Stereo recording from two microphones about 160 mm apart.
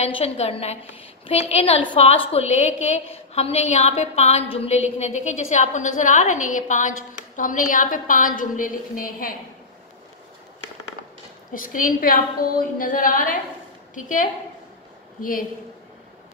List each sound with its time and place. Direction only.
0.0 s a woman's voice: 40° left (ahead or behind); by 9.3 s 60° left (ahead or behind)
11.5 s a woman's voice: 60° left (ahead or behind)